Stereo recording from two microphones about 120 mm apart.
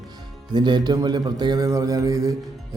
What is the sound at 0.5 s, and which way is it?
A man's voice, 35° right (ahead or behind).